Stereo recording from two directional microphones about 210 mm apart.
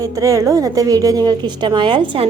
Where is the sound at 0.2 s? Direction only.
15° right (ahead or behind).